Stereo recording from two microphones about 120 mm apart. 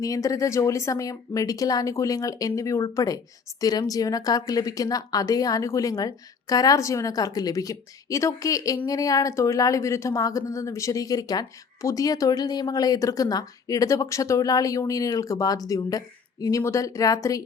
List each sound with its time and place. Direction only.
0.0 s speech: 30° left (ahead or behind)